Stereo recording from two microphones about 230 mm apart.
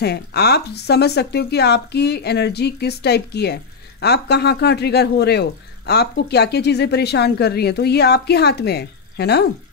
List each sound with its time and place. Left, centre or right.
0.0 s speech: left